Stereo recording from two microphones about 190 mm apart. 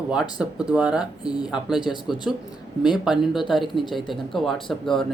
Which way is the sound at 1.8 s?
20° left (ahead or behind).